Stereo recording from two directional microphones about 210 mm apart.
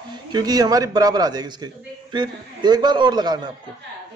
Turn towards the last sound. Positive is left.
turn(degrees=-20)  # may be behind; listen again after turning